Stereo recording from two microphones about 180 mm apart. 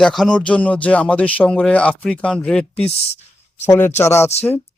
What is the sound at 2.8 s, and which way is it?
Speech, 35° left (ahead or behind).